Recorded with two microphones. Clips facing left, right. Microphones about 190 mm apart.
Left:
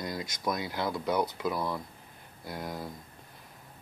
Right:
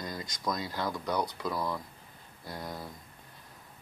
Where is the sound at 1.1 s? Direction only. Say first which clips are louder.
Left 2 dB; 20° left (ahead or behind).